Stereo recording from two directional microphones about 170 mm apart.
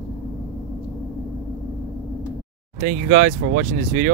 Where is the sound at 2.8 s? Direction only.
55° right (ahead or behind).